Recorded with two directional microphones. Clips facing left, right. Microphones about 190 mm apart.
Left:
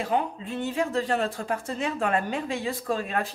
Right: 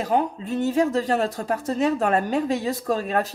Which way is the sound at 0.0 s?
40° right (ahead or behind).